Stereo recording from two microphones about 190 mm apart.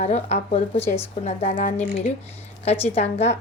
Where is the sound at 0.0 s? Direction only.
35° left (ahead or behind).